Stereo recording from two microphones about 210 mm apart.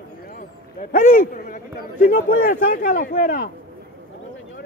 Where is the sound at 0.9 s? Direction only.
40° left (ahead or behind).